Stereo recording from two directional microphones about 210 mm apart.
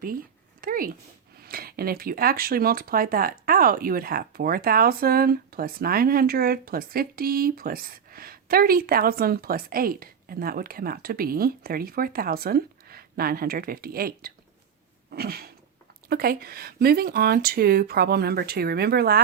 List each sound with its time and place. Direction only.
0.6 s speech: 40° right (ahead or behind)
15.1 s a sound: 45° right (ahead or behind)
16.0 s speech: 45° right (ahead or behind)